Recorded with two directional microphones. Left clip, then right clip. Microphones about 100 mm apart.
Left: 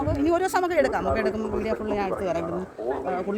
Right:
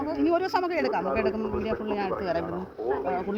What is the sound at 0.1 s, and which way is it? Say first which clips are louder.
A man's voice: left 1 dB; 35° left (ahead or behind).